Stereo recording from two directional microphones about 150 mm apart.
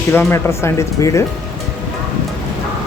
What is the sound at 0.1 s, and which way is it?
Speech, 15° left (ahead or behind).